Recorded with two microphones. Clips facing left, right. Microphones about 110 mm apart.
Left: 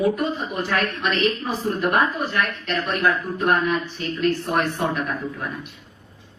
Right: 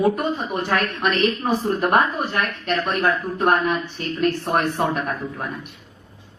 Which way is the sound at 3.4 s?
45° right (ahead or behind).